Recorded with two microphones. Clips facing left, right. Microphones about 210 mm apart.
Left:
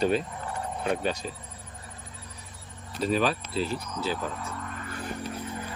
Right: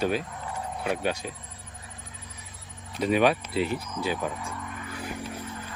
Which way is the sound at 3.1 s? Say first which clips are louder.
Right 4 dB; 65° right (ahead or behind).